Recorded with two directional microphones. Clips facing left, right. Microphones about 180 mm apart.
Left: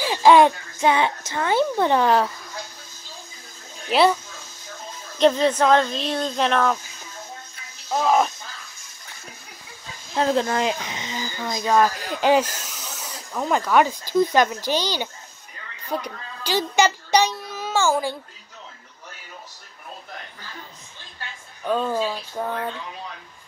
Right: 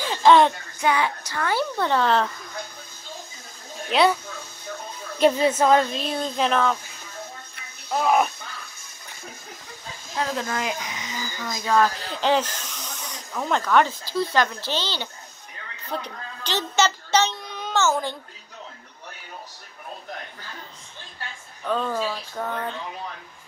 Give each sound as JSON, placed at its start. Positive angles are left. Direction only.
{"t": 0.0, "sound": "child singing", "side_deg": 10}
{"t": 0.7, "sound": "speech", "side_deg": 25}
{"t": 3.9, "sound": "speech", "side_deg": 0}
{"t": 5.2, "sound": "speech", "side_deg": -5}
{"t": 7.9, "sound": "speech", "side_deg": -5}
{"t": 10.1, "sound": "a child's voice", "side_deg": 30}
{"t": 21.6, "sound": "speech", "side_deg": 10}